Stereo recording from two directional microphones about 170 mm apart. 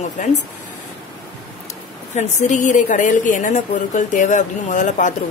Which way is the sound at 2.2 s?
40° left (ahead or behind).